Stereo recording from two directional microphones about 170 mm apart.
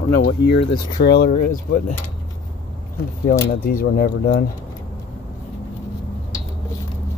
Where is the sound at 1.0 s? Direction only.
70° left (ahead or behind).